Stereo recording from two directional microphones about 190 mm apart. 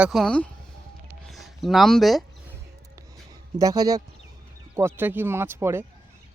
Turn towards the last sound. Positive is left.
turn(degrees=-10)  # may be behind; listen again after turning